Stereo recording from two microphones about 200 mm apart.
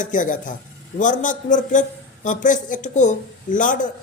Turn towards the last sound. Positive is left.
turn(degrees=40)  # may be behind; listen again after turning